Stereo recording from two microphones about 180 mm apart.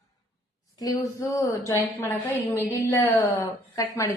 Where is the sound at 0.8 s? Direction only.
20° left (ahead or behind).